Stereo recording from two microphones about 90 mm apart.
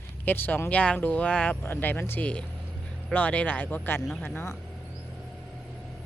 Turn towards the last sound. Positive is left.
turn(degrees=20)  # may be behind; listen again after turning